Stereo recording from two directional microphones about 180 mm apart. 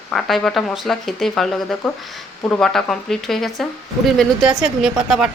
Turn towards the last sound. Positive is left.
turn(degrees=-5)  # may be behind; listen again after turning